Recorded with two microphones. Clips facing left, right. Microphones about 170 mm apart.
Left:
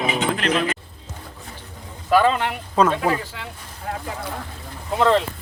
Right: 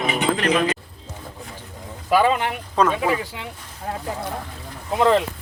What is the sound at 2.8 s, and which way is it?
Speech, 5° left (ahead or behind).